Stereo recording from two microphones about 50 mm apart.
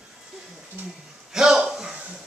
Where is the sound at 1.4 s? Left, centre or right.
Centre.